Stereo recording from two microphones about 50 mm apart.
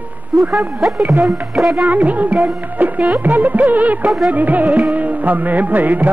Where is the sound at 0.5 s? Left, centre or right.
Centre.